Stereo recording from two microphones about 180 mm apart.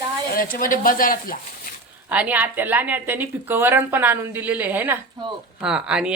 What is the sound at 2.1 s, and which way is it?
A woman's voice, 10° right (ahead or behind).